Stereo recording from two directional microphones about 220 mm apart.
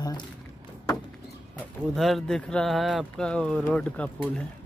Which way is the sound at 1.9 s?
Centre (ahead or behind).